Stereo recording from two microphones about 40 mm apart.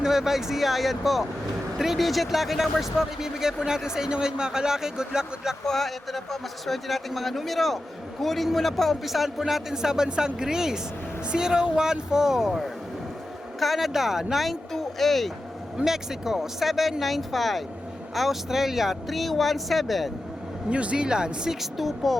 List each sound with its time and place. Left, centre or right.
0.0 s speech: centre
5.6 s speech: centre
14.4 s speech: centre
15.8 s speech: centre
20.7 s speech: right
21.6 s speech: centre